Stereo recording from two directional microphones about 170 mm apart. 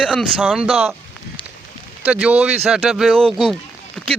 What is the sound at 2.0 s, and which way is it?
Speech, 10° right (ahead or behind).